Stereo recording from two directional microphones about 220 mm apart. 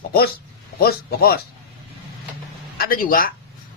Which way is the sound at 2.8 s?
40° left (ahead or behind).